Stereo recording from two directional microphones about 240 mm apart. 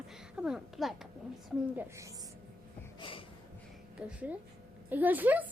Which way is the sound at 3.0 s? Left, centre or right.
Left.